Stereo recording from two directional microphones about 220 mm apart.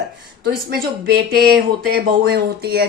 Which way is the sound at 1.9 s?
45° right (ahead or behind).